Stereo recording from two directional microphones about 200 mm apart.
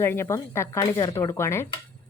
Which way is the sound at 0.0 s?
10° left (ahead or behind).